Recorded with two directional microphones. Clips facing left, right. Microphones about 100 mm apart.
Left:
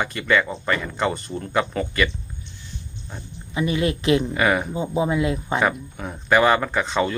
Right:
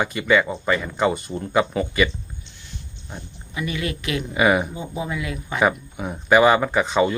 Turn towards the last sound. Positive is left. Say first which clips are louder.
# right 3 dB
turn(degrees=-5)  # may be behind; listen again after turning